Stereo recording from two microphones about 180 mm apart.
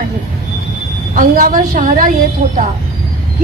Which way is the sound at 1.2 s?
50° right (ahead or behind).